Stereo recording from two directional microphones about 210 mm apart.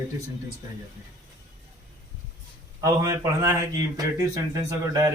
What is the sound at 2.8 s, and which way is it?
Speech, 15° right (ahead or behind).